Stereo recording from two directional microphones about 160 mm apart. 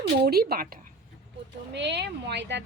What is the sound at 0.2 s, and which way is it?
Speech, 75° right (ahead or behind).